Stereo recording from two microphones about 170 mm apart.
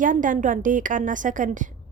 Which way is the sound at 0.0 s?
50° right (ahead or behind).